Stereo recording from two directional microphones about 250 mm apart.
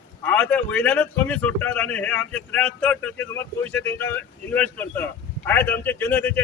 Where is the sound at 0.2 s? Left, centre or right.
Centre.